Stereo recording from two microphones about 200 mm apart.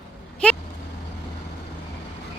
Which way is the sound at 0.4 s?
5° left (ahead or behind).